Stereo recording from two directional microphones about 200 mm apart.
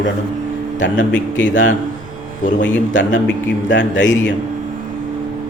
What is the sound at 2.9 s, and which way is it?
A man's voice, 65° left (ahead or behind).